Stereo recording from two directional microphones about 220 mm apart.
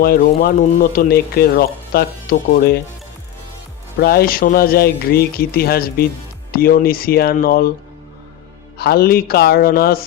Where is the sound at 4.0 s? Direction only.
45° left (ahead or behind).